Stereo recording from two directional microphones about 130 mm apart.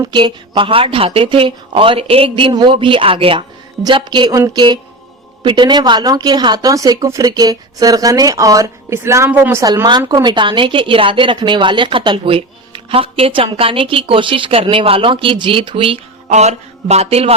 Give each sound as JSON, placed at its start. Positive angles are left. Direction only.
{"t": 0.0, "sound": "a woman's voice", "side_deg": -35}
{"t": 10.0, "sound": "speech", "side_deg": -20}
{"t": 10.2, "sound": "a woman's voice", "side_deg": -35}
{"t": 16.3, "sound": "a sound", "side_deg": -60}